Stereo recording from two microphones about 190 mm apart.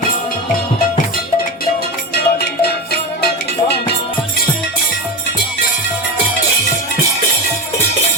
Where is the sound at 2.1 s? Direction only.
55° left (ahead or behind).